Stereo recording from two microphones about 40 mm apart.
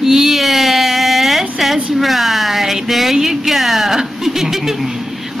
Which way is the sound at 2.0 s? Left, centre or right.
Centre.